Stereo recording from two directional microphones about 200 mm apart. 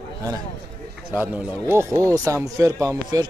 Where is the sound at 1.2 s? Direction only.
10° right (ahead or behind).